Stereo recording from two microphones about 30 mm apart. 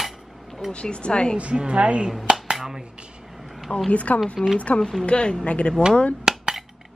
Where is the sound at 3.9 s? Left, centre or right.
Left.